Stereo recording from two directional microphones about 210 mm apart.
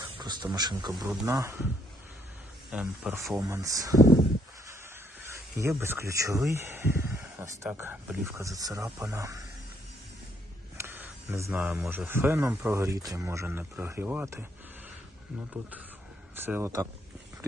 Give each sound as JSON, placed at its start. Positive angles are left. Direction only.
{"t": 0.1, "sound": "a sound", "side_deg": -20}
{"t": 0.5, "sound": "speech", "side_deg": -20}
{"t": 2.7, "sound": "speech", "side_deg": -5}
{"t": 5.2, "sound": "speech", "side_deg": -15}
{"t": 10.8, "sound": "speech", "side_deg": -10}
{"t": 16.3, "sound": "speech", "side_deg": -10}